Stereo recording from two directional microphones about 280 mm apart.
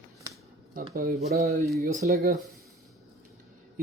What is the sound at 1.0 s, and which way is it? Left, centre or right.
Speech, right.